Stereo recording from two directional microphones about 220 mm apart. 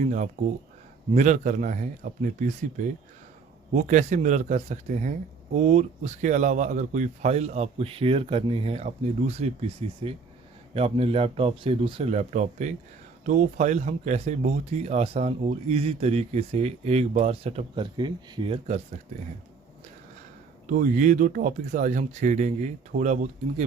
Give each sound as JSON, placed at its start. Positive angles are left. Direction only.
{"t": 0.4, "sound": "speech", "side_deg": -30}
{"t": 3.8, "sound": "speech", "side_deg": -35}
{"t": 20.7, "sound": "speech", "side_deg": -35}